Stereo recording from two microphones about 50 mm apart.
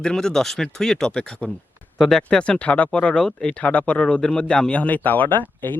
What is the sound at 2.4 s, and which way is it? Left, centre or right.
Speech, left.